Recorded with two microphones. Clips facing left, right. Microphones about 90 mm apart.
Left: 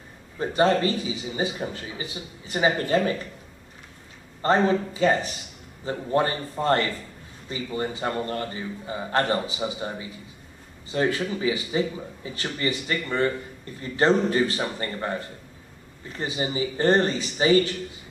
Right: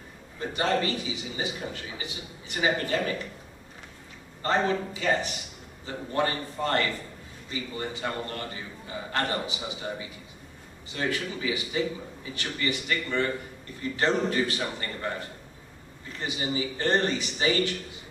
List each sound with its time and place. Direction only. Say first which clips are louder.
0.4 s a man's voice: left 6 dB; 35° left (ahead or behind)
4.4 s a man's voice: left 5 dB; 35° left (ahead or behind)
16.2 s a man's voice: left 3 dB; 30° left (ahead or behind)